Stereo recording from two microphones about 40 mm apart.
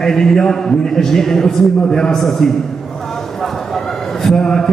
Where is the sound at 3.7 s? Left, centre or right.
Centre.